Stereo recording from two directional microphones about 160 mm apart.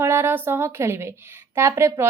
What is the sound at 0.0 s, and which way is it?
A woman's voice, 15° right (ahead or behind).